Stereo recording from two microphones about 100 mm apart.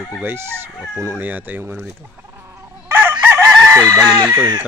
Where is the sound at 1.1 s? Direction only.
15° right (ahead or behind).